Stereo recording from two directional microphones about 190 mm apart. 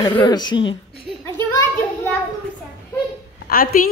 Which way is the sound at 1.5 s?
15° left (ahead or behind).